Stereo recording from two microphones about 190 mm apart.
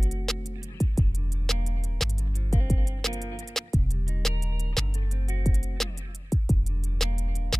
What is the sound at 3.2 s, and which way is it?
Music, 20° left (ahead or behind).